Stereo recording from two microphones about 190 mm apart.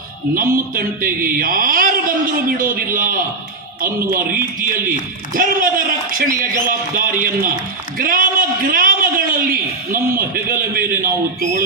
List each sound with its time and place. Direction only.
1.0 s a man's voice: 50° right (ahead or behind)